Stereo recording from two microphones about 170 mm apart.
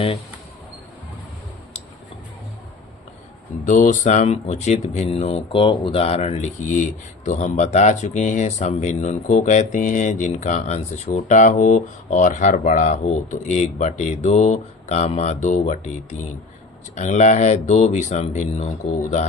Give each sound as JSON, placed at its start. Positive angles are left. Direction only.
{"t": 3.7, "sound": "speech", "side_deg": 45}